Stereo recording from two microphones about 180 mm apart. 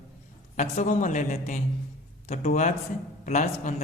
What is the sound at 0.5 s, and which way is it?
A man's voice, 40° left (ahead or behind).